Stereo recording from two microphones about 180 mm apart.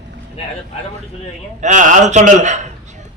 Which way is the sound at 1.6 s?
45° right (ahead or behind).